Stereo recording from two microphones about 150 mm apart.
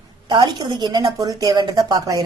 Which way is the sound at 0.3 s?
30° right (ahead or behind).